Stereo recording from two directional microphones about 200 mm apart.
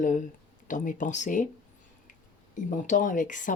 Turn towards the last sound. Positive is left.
turn(degrees=40)  # may be behind; listen again after turning